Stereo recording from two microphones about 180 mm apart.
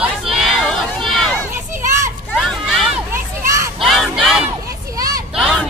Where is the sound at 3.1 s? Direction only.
15° right (ahead or behind).